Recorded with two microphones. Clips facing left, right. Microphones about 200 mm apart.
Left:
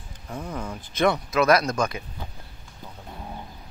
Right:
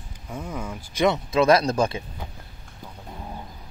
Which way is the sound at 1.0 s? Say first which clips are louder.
Right 1 dB; 25° right (ahead or behind).